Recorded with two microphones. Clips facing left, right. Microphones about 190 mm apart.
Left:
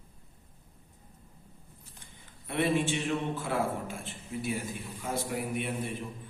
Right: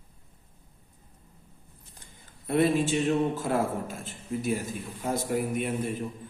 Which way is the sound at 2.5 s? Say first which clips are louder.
Right 5 dB; 40° right (ahead or behind).